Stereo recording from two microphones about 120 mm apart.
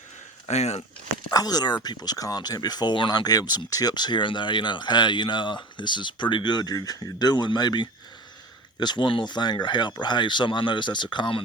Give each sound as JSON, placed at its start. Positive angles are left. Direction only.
{"t": 0.4, "sound": "speech", "side_deg": 65}
{"t": 1.3, "sound": "speech", "side_deg": 35}